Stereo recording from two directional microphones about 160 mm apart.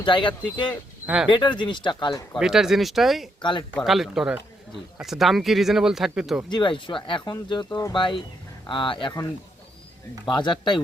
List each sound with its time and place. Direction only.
0.0 s speech: 30° left (ahead or behind)
1.0 s speech: 5° right (ahead or behind)
1.3 s speech: 30° left (ahead or behind)
2.4 s speech: 5° right (ahead or behind)
6.5 s speech: 30° left (ahead or behind)